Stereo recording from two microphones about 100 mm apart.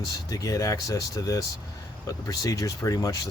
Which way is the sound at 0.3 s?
35° left (ahead or behind).